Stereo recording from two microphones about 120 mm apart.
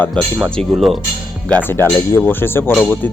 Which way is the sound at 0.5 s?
Centre (ahead or behind).